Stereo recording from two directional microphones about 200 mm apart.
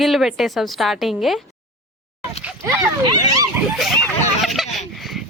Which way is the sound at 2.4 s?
10° right (ahead or behind).